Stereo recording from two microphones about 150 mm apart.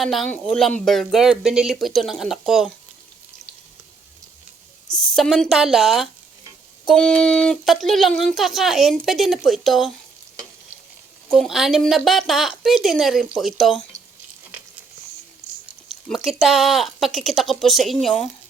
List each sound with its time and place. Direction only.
0.0 s speech: centre (ahead or behind)
4.9 s speech: centre (ahead or behind)
11.3 s speech: centre (ahead or behind)
15.9 s speech: centre (ahead or behind)